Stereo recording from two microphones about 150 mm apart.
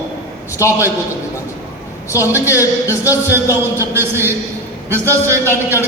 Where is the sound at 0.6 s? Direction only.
20° left (ahead or behind).